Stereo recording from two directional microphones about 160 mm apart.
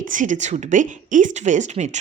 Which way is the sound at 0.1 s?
50° right (ahead or behind).